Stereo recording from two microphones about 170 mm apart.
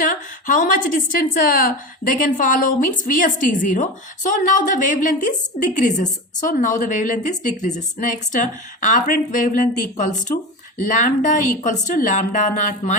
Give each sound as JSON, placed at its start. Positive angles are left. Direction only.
{"t": 0.0, "sound": "a woman's voice", "side_deg": 55}